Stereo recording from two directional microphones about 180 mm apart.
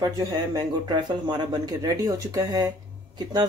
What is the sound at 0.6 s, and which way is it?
Speech, 25° right (ahead or behind).